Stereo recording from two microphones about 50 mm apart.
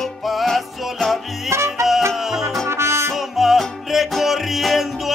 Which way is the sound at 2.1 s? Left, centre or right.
Centre.